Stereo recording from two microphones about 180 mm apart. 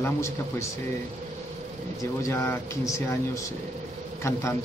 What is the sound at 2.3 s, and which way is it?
Speech, 15° left (ahead or behind).